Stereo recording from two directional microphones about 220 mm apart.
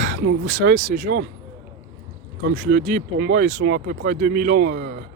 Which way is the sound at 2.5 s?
40° right (ahead or behind).